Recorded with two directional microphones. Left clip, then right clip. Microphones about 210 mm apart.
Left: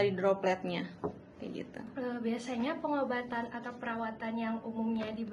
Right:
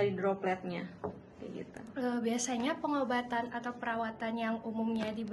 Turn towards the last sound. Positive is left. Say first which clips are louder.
# right 1 dB
turn(degrees=-55)  # may be behind; listen again after turning